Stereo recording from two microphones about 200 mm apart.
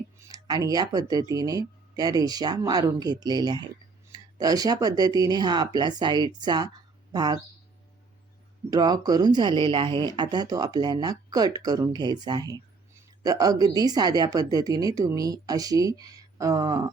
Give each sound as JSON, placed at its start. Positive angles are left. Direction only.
{"t": 0.2, "sound": "speech", "side_deg": -20}
{"t": 8.7, "sound": "speech", "side_deg": -20}